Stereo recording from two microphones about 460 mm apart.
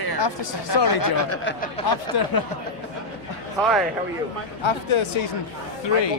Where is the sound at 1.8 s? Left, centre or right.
Left.